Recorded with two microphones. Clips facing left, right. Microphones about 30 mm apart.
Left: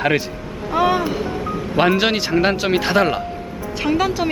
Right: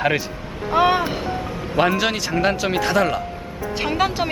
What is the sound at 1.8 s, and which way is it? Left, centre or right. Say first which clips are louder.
Speech: left 2 dB; centre.